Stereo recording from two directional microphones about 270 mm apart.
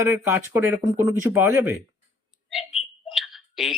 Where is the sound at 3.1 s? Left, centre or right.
Centre.